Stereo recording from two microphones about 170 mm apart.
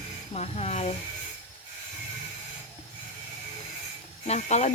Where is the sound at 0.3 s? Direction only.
40° left (ahead or behind).